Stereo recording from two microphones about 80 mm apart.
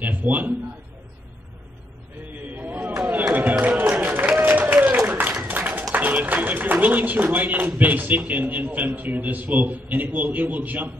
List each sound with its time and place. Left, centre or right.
0.0 s a man's voice: right
2.5 s a sound: right
3.9 s applause: right
5.0 s speech: right